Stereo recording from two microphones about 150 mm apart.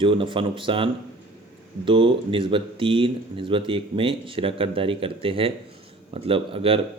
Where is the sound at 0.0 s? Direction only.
35° right (ahead or behind).